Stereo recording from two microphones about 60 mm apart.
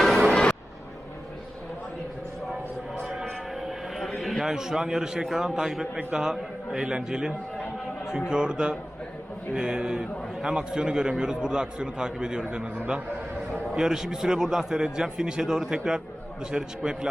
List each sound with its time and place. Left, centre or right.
0.3 s music: centre
3.6 s a man's voice: centre
13.7 s a man's voice: centre